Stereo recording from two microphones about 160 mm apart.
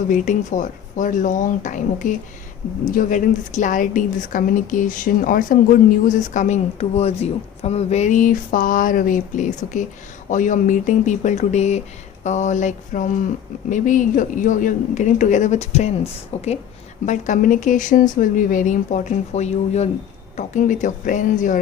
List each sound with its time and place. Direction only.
0.1 s a woman's voice: 50° left (ahead or behind)
17.1 s a woman's voice: 50° left (ahead or behind)